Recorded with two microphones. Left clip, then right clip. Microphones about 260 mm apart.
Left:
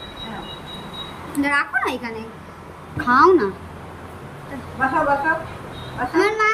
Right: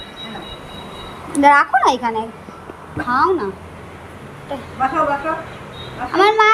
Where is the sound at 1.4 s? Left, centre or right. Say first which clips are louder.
Right 9 dB; right.